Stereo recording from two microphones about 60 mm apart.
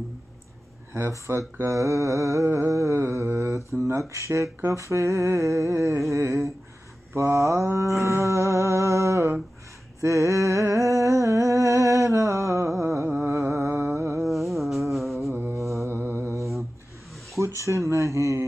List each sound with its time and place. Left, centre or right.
0.9 s speech: right
1.7 s music: right
9.9 s humming: right
13.0 s humming: right
13.5 s a sound: right
14.2 s music: centre
15.9 s mantra: right
17.4 s music: right